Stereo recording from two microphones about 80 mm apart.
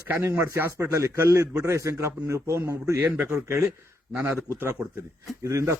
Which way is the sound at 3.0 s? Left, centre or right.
Right.